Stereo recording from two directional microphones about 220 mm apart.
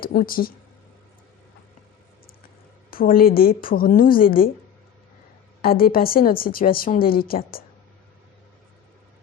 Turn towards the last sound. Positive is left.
turn(degrees=40)  # may be behind; listen again after turning